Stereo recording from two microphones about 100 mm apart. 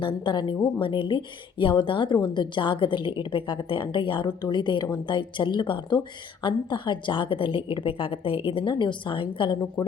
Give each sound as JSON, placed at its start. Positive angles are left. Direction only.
{"t": 0.0, "sound": "a woman's voice", "side_deg": 50}